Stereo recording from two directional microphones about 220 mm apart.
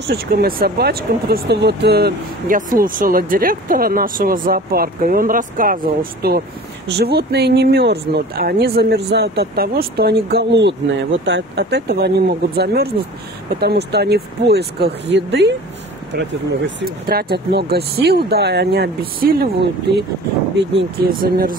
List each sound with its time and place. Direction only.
0.0 s speech: 45° right (ahead or behind)